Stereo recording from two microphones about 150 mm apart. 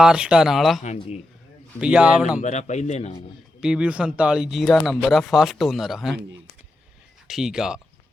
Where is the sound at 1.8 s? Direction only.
10° right (ahead or behind).